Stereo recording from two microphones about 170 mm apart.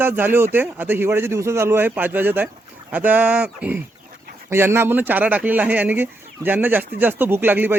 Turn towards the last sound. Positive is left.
turn(degrees=-10)  # may be behind; listen again after turning